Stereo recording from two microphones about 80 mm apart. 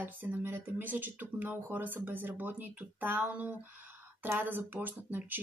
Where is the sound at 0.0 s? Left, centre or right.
Right.